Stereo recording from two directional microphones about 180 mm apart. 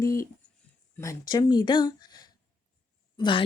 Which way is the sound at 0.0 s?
15° left (ahead or behind).